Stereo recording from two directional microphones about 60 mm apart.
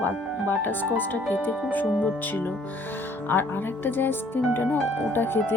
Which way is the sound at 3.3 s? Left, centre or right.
Left.